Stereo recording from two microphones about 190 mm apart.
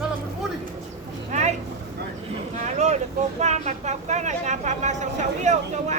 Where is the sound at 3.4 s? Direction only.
35° right (ahead or behind).